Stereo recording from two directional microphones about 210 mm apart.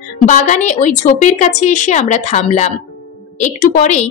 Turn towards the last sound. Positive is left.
turn(degrees=35)  # may be behind; listen again after turning